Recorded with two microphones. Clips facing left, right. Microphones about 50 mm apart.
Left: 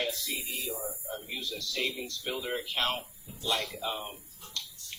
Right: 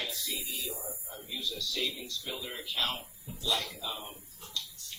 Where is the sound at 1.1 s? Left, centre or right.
Left.